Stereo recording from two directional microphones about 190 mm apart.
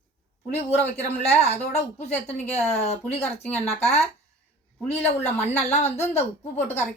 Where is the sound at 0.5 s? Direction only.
35° left (ahead or behind).